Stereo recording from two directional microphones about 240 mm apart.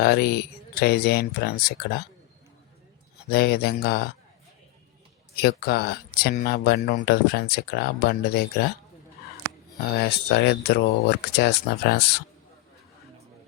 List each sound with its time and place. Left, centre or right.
0.0 s speech: left
3.2 s speech: left
5.4 s speech: left
9.9 s speech: left